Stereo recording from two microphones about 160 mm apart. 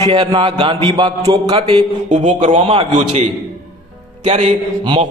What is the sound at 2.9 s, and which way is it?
A man's voice, 45° right (ahead or behind).